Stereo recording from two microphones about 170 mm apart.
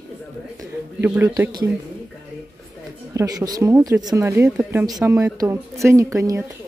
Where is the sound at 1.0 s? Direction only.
10° right (ahead or behind).